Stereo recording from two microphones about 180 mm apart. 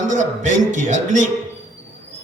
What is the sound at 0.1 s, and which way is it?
Mantra, 45° right (ahead or behind).